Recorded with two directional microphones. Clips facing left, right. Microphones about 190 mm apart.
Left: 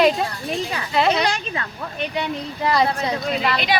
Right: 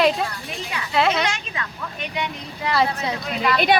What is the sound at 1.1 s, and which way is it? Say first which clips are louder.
A woman's voice: left 3 dB; 35° left (ahead or behind).